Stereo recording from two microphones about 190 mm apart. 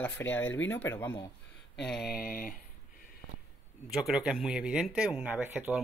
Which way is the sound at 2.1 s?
50° left (ahead or behind).